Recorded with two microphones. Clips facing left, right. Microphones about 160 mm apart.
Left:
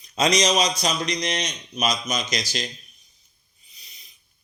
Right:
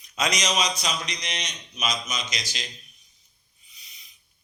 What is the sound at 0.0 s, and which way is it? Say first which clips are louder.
A man's voice: left 7 dB; 30° left (ahead or behind).